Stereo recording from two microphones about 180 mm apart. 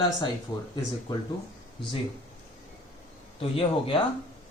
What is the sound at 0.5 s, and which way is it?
Speech, 20° left (ahead or behind).